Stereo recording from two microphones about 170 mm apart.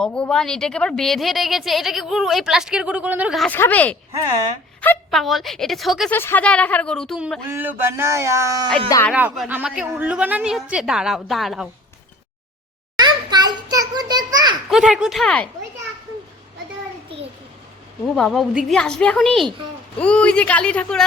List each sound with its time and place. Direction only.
0.0 s a woman's voice: 5° left (ahead or behind)
3.4 s speech: 10° left (ahead or behind)
5.1 s a woman's voice: centre (ahead or behind)
6.1 s speech: 10° left (ahead or behind)
7.5 s speech: 15° right (ahead or behind)
9.1 s a woman's voice: 5° right (ahead or behind)
13.0 s a sound: 25° right (ahead or behind)
14.7 s a woman's voice: 5° right (ahead or behind)
18.0 s a woman's voice: centre (ahead or behind)